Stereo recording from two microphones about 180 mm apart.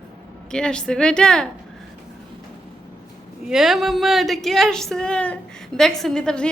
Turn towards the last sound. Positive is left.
turn(degrees=5)  # may be behind; listen again after turning